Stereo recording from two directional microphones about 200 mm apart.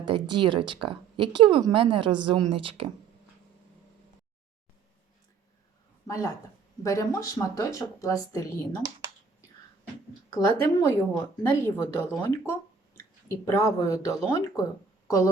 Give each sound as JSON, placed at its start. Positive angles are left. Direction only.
{"t": 0.0, "sound": "speech", "side_deg": -25}
{"t": 6.1, "sound": "speech", "side_deg": 15}
{"t": 10.2, "sound": "speech", "side_deg": 15}